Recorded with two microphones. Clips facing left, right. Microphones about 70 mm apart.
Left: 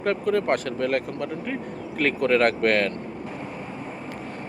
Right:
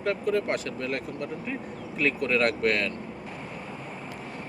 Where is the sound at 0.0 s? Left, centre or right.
Left.